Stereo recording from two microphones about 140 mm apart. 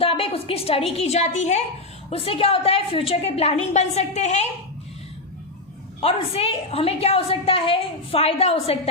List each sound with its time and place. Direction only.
0.0 s a woman's voice: 40° left (ahead or behind)
2.0 s a woman's voice: 45° left (ahead or behind)
6.0 s a woman's voice: 45° left (ahead or behind)